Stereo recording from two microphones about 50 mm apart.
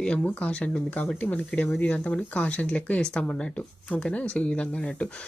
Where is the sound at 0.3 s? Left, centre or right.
Left.